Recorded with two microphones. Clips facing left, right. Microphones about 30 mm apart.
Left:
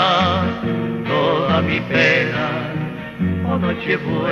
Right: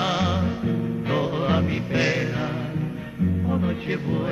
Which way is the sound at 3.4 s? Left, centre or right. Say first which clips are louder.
Left 5 dB; left.